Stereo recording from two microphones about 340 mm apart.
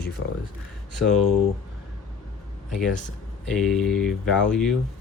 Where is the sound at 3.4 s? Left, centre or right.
Centre.